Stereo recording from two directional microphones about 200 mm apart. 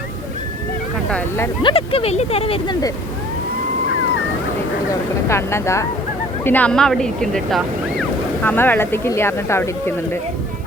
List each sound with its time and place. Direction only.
1.6 s speech: 30° left (ahead or behind)
5.3 s speech: 15° left (ahead or behind)